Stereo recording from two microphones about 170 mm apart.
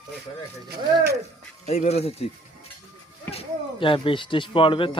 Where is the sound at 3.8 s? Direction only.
30° left (ahead or behind).